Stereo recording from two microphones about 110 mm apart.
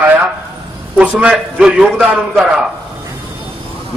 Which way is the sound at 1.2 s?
5° right (ahead or behind).